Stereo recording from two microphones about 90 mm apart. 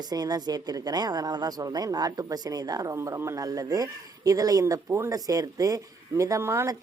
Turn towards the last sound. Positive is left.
turn(degrees=-30)  # may be behind; listen again after turning